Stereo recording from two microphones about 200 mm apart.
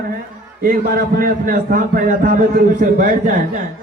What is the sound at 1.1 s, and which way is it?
Speech, 45° right (ahead or behind).